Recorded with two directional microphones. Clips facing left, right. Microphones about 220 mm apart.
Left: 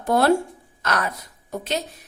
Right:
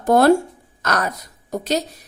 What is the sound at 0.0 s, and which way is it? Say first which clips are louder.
A woman's voice: right 5 dB; 45° right (ahead or behind).